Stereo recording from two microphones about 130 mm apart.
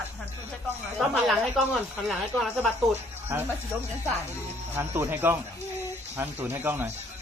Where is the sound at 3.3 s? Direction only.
20° right (ahead or behind).